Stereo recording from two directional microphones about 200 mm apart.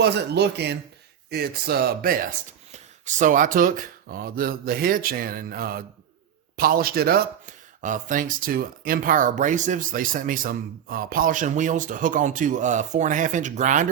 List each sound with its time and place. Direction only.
0.0 s speech: 55° right (ahead or behind); by 13.8 s 40° right (ahead or behind)